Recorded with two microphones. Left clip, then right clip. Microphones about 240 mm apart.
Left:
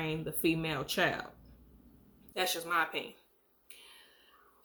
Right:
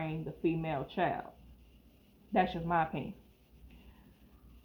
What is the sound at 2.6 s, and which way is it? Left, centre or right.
Speech, left.